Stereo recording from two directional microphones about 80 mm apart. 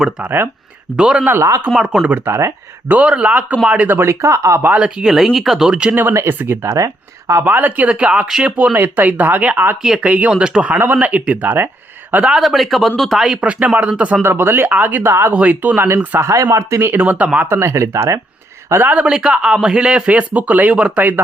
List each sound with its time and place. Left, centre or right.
0.3 s speech: right
0.9 s speech: centre
2.0 s speech: right
4.6 s speech: centre
5.0 s speech: centre
5.9 s speech: right
7.4 s speech: right
8.7 s speech: right
12.3 s speech: centre
13.4 s speech: centre
14.2 s speech: right
16.1 s speech: right; by 17.5 s centre
17.5 s speech: right
18.7 s speech: right